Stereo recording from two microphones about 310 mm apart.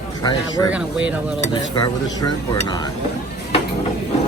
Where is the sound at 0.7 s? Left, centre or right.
Centre.